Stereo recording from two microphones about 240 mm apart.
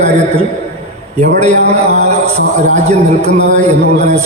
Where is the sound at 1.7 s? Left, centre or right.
Right.